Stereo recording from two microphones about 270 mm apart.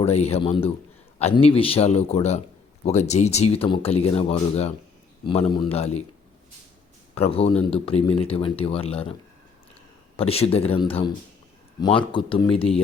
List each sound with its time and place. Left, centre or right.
0.0 s speech: left
7.2 s speech: left
10.2 s speech: left